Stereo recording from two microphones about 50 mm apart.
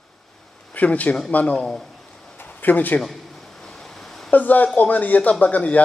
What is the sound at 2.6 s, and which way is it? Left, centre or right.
Speech, left.